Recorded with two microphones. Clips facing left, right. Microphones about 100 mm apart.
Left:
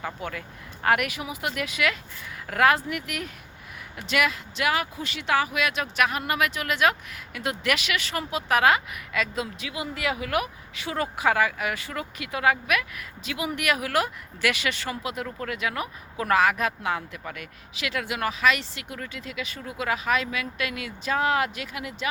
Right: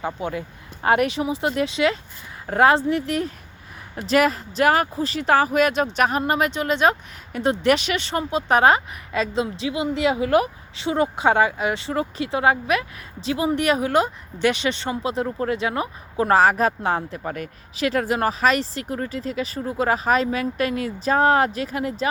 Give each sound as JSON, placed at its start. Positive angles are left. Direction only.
{"t": 0.0, "sound": "speech", "side_deg": -25}